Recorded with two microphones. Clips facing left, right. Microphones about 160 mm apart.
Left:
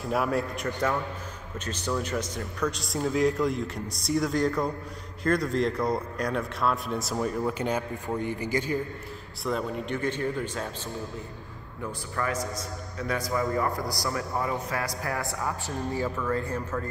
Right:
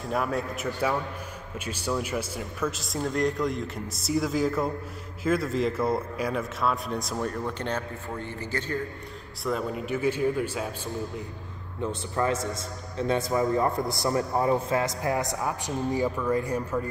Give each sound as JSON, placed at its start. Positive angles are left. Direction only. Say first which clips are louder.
{"t": 0.0, "sound": "a man's voice", "louder": "left 1 dB", "side_deg": 0}
{"t": 9.4, "sound": "speech", "louder": "right 1 dB", "side_deg": 0}
{"t": 11.8, "sound": "a man's voice", "louder": "right 4 dB", "side_deg": -25}